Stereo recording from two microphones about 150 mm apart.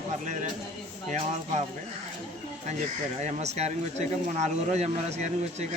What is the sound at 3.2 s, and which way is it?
Speech, 45° right (ahead or behind).